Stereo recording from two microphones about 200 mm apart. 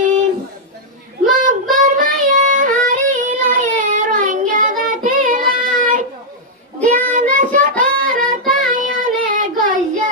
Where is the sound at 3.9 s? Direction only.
40° right (ahead or behind).